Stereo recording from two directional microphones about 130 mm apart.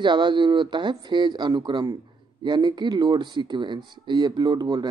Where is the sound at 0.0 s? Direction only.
35° right (ahead or behind).